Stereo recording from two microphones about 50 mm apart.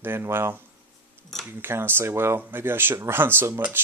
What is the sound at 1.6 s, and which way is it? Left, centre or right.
Speech, right.